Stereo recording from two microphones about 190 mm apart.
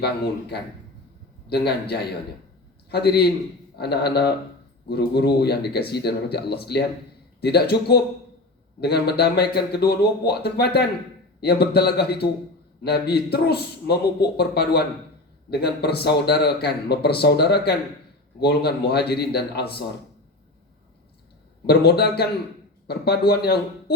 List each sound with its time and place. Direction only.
1.5 s speech: 60° left (ahead or behind)
21.7 s speech: 55° left (ahead or behind)